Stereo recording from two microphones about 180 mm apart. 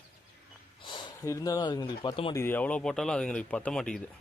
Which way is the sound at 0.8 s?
25° left (ahead or behind).